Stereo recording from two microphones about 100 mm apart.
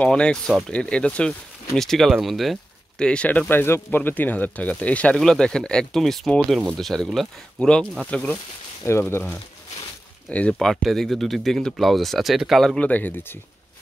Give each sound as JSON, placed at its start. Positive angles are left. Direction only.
{"t": 0.0, "sound": "speech", "side_deg": 10}
{"t": 2.2, "sound": "a sound", "side_deg": 0}
{"t": 3.1, "sound": "speech", "side_deg": 10}
{"t": 10.6, "sound": "speech", "side_deg": 0}